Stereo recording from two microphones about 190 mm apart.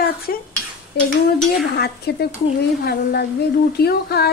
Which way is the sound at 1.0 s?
60° left (ahead or behind).